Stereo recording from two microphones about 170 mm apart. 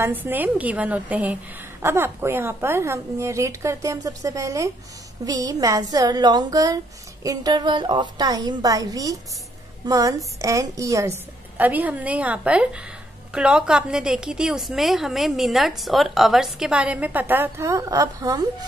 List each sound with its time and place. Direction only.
0.0 s a woman's voice: 10° right (ahead or behind)